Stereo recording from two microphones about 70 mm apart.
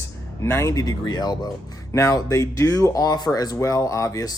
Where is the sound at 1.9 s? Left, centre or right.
Left.